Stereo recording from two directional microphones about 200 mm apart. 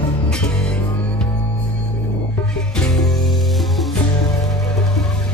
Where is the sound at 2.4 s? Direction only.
5° left (ahead or behind).